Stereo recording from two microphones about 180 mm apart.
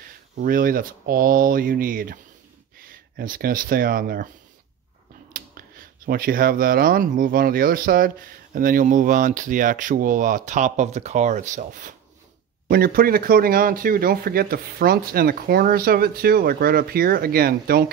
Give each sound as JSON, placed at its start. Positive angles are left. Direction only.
{"t": 0.4, "sound": "speech", "side_deg": -50}
{"t": 5.3, "sound": "speech", "side_deg": -50}
{"t": 12.6, "sound": "speech", "side_deg": -55}